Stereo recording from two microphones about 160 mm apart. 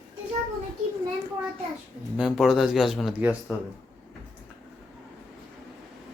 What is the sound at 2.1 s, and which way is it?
Speech, 5° right (ahead or behind).